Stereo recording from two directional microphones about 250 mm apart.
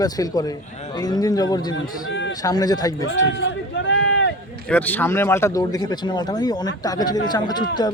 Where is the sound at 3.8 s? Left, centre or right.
Left.